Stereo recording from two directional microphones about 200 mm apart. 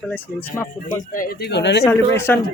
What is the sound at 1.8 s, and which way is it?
Speech, 10° left (ahead or behind).